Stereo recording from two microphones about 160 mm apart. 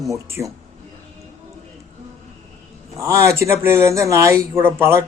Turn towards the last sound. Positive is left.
turn(degrees=-15)  # may be behind; listen again after turning